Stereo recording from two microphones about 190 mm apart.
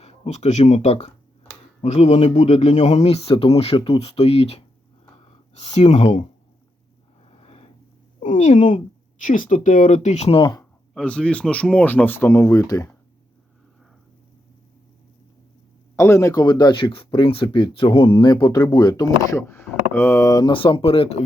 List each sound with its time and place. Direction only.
0.0 s speech: 35° left (ahead or behind)
7.3 s a sound: 30° left (ahead or behind)
8.2 s speech: 40° left (ahead or behind)
10.9 s speech: 5° left (ahead or behind)
16.0 s speech: 15° left (ahead or behind); by 21.2 s 30° left (ahead or behind)